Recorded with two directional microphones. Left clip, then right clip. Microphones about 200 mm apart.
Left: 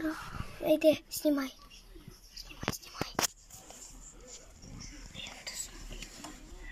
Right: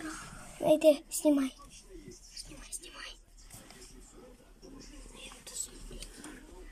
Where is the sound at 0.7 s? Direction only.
10° right (ahead or behind).